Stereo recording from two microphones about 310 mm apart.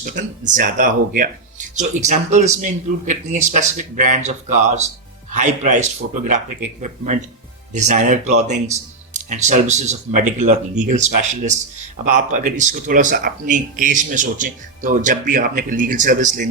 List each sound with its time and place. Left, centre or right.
0.0 s speech: right
6.8 s speech: right